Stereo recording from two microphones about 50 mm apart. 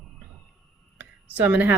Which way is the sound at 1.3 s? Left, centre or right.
Right.